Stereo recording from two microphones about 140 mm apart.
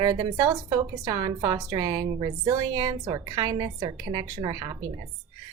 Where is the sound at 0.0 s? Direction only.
25° right (ahead or behind).